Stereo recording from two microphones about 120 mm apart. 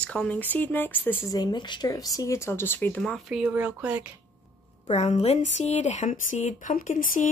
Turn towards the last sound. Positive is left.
turn(degrees=90)